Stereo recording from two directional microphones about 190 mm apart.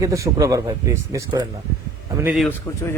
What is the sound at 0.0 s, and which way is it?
Speech, 15° right (ahead or behind).